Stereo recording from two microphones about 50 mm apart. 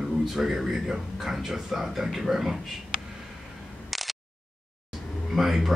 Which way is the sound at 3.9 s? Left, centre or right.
Centre.